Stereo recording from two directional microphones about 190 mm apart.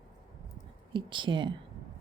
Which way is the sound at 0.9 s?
25° right (ahead or behind).